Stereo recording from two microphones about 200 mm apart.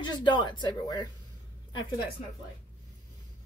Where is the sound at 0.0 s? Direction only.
20° left (ahead or behind).